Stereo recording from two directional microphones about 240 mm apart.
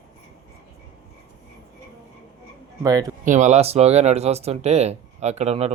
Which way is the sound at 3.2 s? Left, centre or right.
Right.